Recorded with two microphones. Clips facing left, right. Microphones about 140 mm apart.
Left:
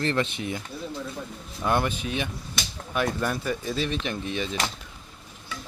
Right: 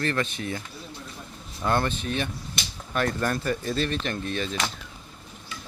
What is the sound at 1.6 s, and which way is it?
Speech, 10° left (ahead or behind).